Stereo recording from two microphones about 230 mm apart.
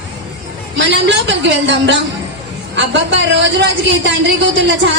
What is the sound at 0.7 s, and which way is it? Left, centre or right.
A woman's voice, right.